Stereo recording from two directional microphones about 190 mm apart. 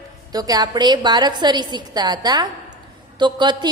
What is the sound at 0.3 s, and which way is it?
A woman's voice, 20° right (ahead or behind).